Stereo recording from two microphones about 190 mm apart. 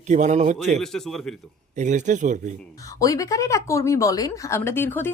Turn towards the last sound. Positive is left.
turn(degrees=10)  # may be behind; listen again after turning